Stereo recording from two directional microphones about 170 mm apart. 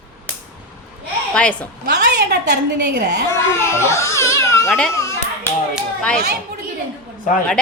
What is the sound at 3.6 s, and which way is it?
A child's voice, 15° left (ahead or behind).